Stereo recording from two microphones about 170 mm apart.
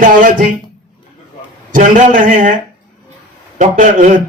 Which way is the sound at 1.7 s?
50° right (ahead or behind).